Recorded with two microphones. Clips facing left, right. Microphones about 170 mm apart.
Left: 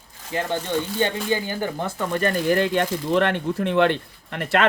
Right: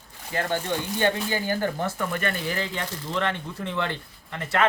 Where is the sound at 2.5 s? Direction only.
60° left (ahead or behind).